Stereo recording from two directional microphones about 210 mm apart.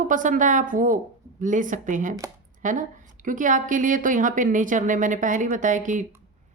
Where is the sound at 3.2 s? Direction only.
40° right (ahead or behind).